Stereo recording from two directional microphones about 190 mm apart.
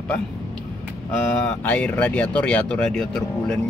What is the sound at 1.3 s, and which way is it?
Speech, 5° left (ahead or behind).